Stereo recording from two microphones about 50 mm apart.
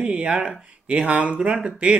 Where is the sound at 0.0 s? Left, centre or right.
Centre.